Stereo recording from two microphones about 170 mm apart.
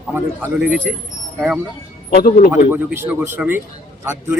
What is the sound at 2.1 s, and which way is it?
Speech, 55° left (ahead or behind).